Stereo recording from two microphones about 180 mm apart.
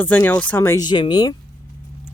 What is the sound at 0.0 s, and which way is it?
Speech, 10° left (ahead or behind).